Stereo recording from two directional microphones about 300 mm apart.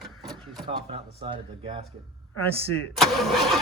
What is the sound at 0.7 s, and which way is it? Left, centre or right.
Speech, centre.